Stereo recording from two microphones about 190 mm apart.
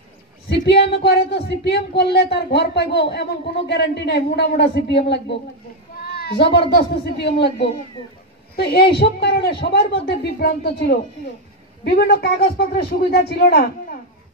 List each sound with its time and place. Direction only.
0.5 s speech: 60° left (ahead or behind)
6.0 s a sound: 55° left (ahead or behind)
6.7 s speech: 60° left (ahead or behind)